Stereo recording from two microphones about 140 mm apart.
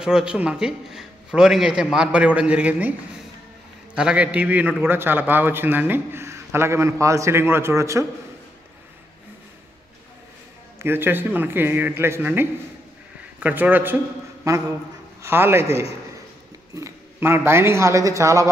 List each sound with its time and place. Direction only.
0.0 s a man's voice: 5° right (ahead or behind)
3.9 s a man's voice: 5° right (ahead or behind)
10.8 s a man's voice: 15° right (ahead or behind)